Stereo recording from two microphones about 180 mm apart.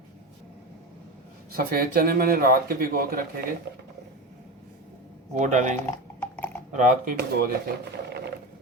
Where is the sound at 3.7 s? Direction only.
70° right (ahead or behind).